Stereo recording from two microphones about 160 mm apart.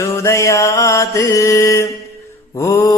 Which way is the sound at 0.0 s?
20° left (ahead or behind).